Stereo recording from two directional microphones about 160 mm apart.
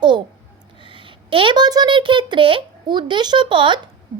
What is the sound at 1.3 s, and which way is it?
A child's voice, 35° right (ahead or behind).